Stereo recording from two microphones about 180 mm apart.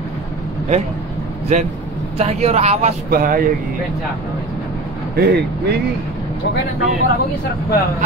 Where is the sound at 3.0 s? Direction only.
50° right (ahead or behind).